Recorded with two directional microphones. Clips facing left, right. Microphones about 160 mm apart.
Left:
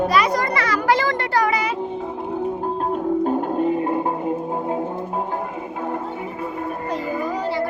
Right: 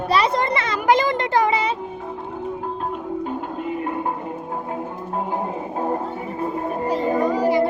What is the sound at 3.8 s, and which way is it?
Music, 30° left (ahead or behind).